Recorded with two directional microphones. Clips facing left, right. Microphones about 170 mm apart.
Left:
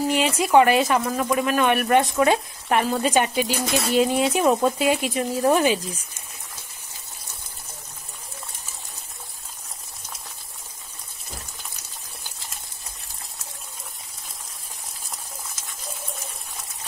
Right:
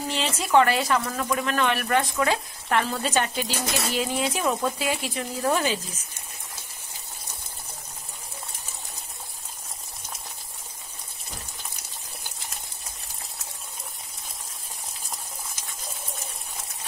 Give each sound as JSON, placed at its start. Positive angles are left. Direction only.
{"t": 0.1, "sound": "speech", "side_deg": 15}